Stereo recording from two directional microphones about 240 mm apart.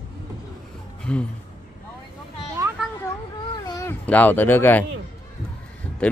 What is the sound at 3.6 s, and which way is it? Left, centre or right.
Speech, centre.